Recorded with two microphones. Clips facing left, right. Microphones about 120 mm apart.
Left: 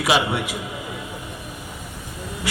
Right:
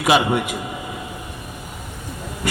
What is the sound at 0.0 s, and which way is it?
Speech, 50° right (ahead or behind).